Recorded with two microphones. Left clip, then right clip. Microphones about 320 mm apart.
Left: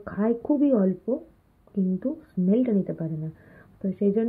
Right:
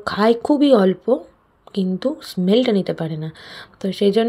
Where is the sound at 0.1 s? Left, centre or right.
Right.